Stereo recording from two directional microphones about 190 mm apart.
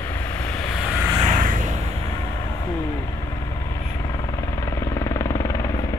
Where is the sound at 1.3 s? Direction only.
45° right (ahead or behind).